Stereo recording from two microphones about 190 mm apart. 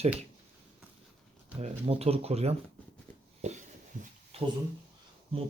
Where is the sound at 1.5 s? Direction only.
30° right (ahead or behind).